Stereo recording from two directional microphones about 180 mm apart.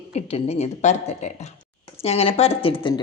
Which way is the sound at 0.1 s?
35° left (ahead or behind).